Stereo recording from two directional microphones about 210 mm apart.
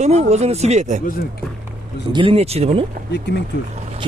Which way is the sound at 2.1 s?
25° right (ahead or behind).